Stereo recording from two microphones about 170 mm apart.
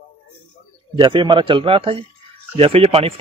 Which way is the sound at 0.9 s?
30° right (ahead or behind).